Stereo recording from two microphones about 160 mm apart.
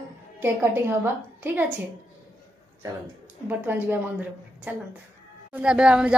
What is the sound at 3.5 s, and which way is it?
A woman's voice, 10° right (ahead or behind).